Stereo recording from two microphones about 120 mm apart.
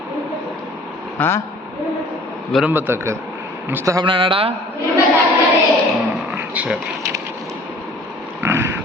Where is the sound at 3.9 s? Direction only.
45° right (ahead or behind).